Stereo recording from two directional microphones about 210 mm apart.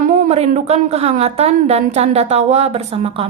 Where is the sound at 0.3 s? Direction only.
30° right (ahead or behind).